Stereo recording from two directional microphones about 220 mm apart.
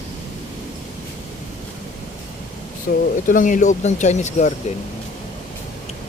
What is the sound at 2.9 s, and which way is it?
Speech, 40° left (ahead or behind).